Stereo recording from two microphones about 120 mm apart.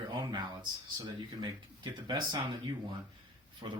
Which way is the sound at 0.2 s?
35° right (ahead or behind).